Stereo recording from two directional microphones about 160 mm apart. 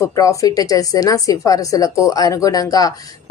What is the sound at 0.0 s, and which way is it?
A woman's voice, 20° left (ahead or behind).